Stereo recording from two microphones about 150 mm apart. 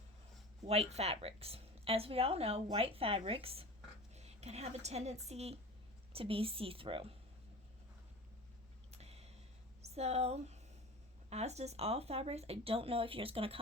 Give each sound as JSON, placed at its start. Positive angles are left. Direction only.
{"t": 0.7, "sound": "a woman's voice", "side_deg": -45}
{"t": 8.9, "sound": "a sound", "side_deg": -45}
{"t": 9.8, "sound": "speech", "side_deg": -45}